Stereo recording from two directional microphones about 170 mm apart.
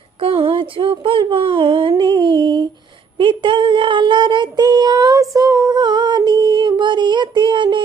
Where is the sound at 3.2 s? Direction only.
30° right (ahead or behind).